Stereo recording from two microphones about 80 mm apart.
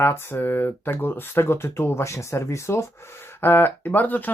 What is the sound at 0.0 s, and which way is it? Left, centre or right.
Speech, left.